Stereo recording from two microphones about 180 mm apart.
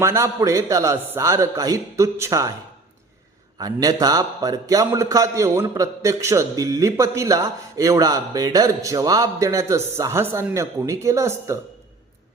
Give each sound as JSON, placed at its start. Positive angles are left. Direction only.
{"t": 0.0, "sound": "a man's voice", "side_deg": -15}
{"t": 3.6, "sound": "a man's voice", "side_deg": -20}